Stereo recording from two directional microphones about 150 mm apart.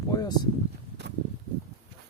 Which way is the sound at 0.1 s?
25° left (ahead or behind).